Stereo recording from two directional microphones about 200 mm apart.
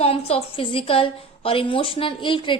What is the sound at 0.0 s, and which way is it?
A woman's voice, 30° left (ahead or behind).